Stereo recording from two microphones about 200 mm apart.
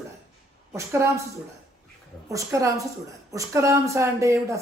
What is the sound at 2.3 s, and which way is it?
Speech, 15° right (ahead or behind).